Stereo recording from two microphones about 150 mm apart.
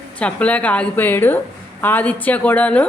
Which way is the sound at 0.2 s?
10° left (ahead or behind).